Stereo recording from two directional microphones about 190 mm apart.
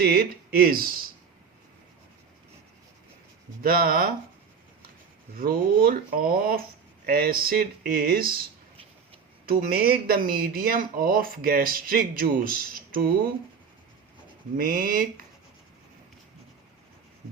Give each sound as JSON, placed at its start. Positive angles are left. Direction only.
{"t": 0.0, "sound": "speech", "side_deg": -50}
{"t": 3.6, "sound": "speech", "side_deg": -50}
{"t": 5.4, "sound": "speech", "side_deg": -50}
{"t": 9.5, "sound": "speech", "side_deg": -50}
{"t": 14.5, "sound": "speech", "side_deg": -45}